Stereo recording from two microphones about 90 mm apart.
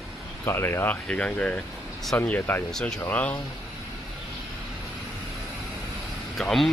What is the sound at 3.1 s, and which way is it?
Speech, 15° left (ahead or behind).